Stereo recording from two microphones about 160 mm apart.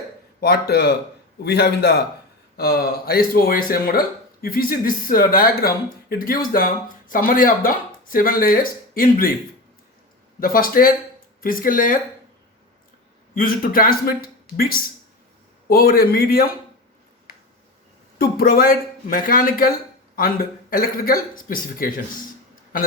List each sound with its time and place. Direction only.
0.3 s speech: 80° left
0.7 s a man's voice: 90° left
2.6 s speech: 75° left (ahead or behind)
10.4 s speech: 60° left (ahead or behind)
13.3 s a man's voice: 65° left (ahead or behind)
18.2 s a man's voice: 70° left (ahead or behind)